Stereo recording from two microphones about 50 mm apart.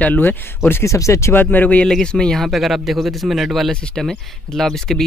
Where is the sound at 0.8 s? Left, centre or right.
Left.